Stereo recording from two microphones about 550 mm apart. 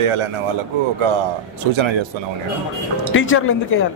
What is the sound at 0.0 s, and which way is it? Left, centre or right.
Speech, right.